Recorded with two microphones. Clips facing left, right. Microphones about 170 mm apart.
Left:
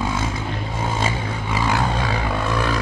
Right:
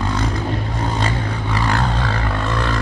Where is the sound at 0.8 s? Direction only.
5° left (ahead or behind).